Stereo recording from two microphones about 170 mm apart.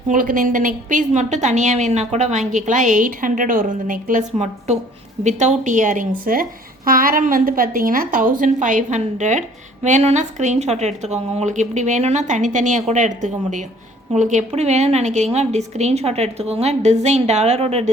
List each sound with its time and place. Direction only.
0.1 s a woman's voice: 50° right (ahead or behind); by 17.9 s 35° right (ahead or behind)